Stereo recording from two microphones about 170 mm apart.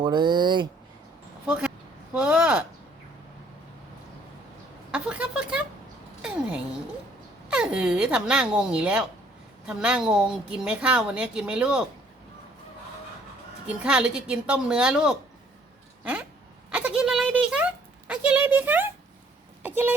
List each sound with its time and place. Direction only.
0.0 s speech: 25° right (ahead or behind)
1.5 s a woman's voice: 5° right (ahead or behind)
4.9 s a sound: 5° right (ahead or behind)
7.5 s a woman's voice: 5° right (ahead or behind)
13.7 s a woman's voice: 5° right (ahead or behind)
16.7 s a sound: 5° right (ahead or behind)